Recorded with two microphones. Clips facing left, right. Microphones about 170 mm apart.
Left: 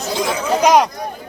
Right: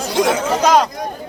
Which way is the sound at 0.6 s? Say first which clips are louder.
Left 2 dB; 15° left (ahead or behind).